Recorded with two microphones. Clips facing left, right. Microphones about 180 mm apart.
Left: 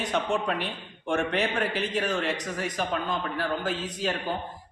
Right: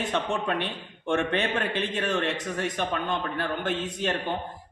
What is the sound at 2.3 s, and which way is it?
A man's voice, 25° right (ahead or behind).